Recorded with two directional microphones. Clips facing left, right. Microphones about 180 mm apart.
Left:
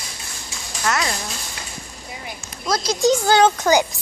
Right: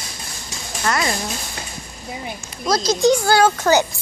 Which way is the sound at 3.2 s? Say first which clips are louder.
Even; 20° left (ahead or behind).